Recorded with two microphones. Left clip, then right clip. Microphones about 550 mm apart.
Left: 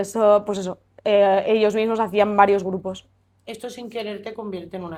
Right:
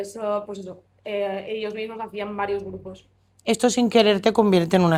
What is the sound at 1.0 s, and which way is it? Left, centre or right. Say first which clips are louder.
A woman's voice: left 10 dB; left.